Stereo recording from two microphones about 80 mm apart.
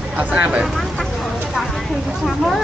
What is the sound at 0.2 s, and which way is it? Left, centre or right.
Speech, centre.